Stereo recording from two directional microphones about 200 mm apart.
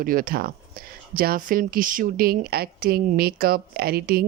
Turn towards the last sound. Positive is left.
turn(degrees=-50)  # may be behind; listen again after turning